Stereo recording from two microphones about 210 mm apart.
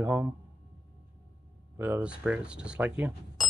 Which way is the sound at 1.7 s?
10° right (ahead or behind).